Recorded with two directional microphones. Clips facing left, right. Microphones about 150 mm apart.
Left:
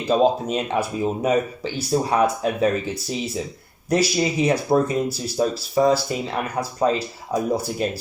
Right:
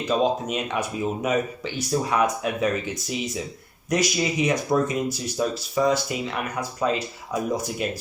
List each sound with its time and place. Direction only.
0.0 s speech: 35° left (ahead or behind)